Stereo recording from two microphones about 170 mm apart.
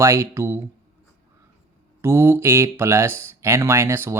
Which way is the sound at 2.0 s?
15° right (ahead or behind).